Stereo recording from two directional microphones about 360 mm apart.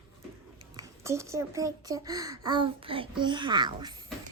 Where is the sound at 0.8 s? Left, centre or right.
Centre.